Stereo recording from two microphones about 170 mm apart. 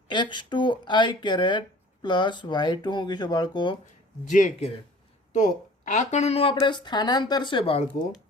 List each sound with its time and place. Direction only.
0.1 s speech: 25° left (ahead or behind)
4.3 s speech: 45° left (ahead or behind)